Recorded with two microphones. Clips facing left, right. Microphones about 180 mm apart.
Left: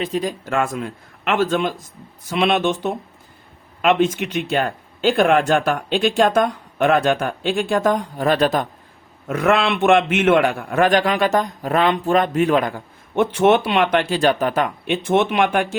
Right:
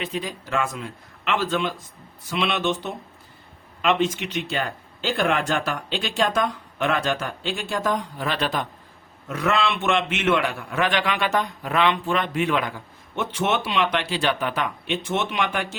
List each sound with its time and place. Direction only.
0.0 s a man's voice: 40° left (ahead or behind)